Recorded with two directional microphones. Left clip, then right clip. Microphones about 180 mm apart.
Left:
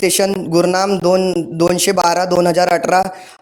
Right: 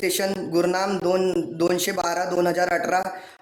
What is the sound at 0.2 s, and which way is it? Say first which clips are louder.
Speech: left 8 dB; 45° left (ahead or behind).